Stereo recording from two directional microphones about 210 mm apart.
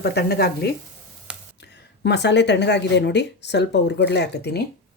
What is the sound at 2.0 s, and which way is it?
Speech, 55° left (ahead or behind).